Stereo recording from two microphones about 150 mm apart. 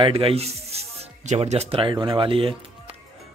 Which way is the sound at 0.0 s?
40° right (ahead or behind).